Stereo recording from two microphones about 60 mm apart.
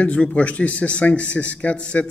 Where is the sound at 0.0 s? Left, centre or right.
Left.